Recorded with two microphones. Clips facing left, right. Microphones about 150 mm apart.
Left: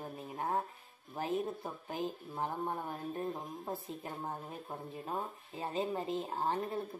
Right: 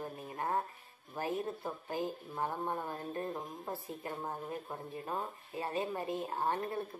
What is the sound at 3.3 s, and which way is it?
Speech, centre (ahead or behind).